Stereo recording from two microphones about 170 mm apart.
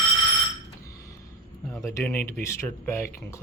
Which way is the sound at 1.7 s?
15° left (ahead or behind).